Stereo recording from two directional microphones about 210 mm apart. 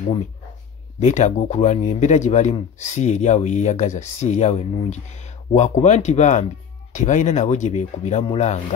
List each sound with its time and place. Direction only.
0.9 s speech: 35° left (ahead or behind)